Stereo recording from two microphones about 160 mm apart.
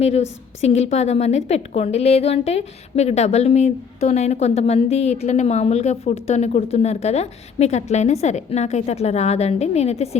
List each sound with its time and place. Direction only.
0.0 s a woman's voice: 40° left (ahead or behind)